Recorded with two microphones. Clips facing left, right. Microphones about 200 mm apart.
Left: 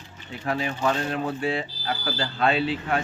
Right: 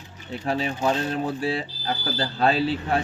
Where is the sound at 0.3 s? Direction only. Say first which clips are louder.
Right 2 dB; 35° right (ahead or behind).